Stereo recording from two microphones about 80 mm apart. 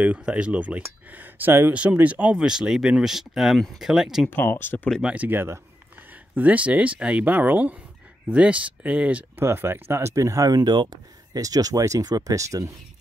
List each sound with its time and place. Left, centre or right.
0.0 s speech: centre
2.3 s speech: centre
4.3 s speech: left
5.0 s speech: centre
9.4 s speech: right